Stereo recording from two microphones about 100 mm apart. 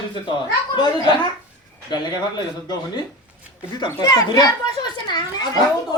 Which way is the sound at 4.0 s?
35° left (ahead or behind).